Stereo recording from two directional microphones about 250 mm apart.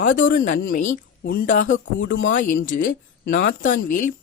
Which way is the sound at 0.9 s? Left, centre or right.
Left.